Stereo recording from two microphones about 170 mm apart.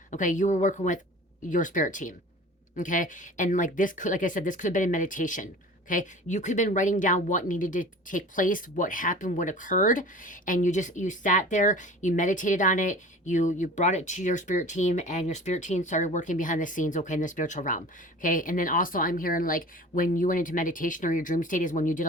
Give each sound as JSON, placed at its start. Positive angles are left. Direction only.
{"t": 0.1, "sound": "speech", "side_deg": 50}